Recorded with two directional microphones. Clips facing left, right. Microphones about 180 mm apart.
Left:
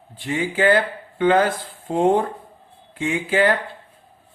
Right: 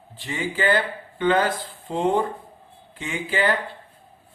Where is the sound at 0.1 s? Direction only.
50° left (ahead or behind).